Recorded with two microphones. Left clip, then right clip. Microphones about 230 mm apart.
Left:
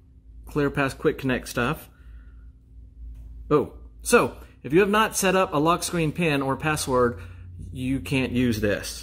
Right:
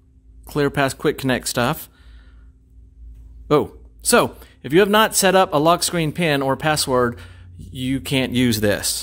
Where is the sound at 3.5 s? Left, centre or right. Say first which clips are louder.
Right 4 dB; right.